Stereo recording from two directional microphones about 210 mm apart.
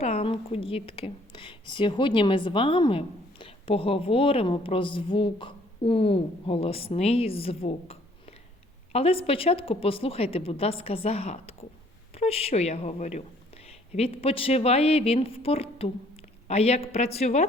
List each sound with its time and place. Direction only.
0.0 s a woman's voice: 30° left (ahead or behind)